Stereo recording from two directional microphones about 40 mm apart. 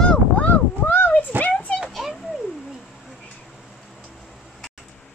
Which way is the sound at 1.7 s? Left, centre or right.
Centre.